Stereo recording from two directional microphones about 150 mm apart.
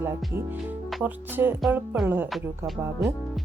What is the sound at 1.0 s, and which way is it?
Speech, 15° right (ahead or behind).